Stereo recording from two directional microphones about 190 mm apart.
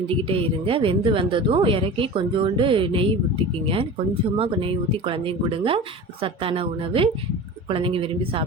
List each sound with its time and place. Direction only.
0.1 s a woman's voice: 30° right (ahead or behind)